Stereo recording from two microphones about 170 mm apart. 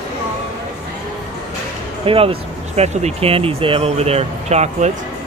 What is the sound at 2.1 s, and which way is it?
Speech, 35° right (ahead or behind).